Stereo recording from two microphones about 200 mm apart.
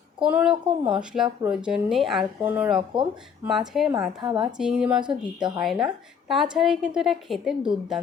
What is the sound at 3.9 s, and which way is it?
Speech, 20° right (ahead or behind).